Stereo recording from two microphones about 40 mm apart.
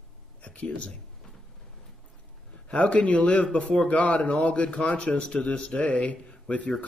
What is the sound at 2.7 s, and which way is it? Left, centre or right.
A man's voice, left.